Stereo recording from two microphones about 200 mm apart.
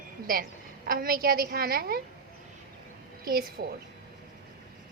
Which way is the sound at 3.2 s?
50° right (ahead or behind).